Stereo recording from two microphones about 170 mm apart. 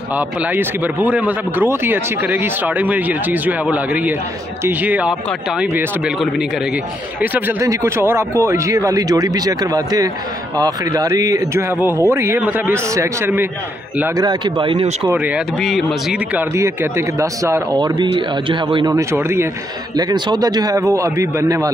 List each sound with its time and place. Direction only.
0.6 s speech: 10° right (ahead or behind)
7.2 s a man's voice: 10° right (ahead or behind)
14.1 s a man's voice: 25° right (ahead or behind)
15.0 s speech: 10° right (ahead or behind)
16.3 s a man's voice: 15° right (ahead or behind)